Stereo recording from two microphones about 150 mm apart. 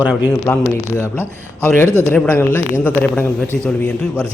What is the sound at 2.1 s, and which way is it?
A man's voice, 10° left (ahead or behind).